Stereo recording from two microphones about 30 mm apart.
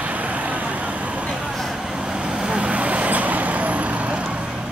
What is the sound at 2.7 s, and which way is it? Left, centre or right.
Vehicle, right.